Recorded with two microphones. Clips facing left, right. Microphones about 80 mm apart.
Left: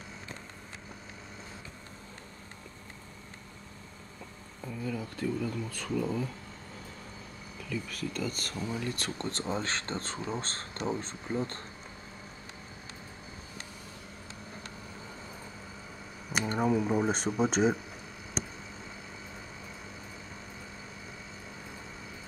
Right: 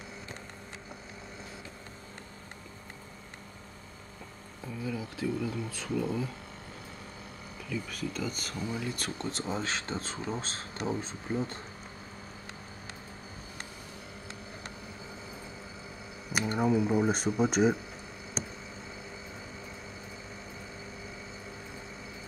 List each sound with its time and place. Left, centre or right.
4.6 s speech: centre
7.7 s speech: centre
16.5 s speech: centre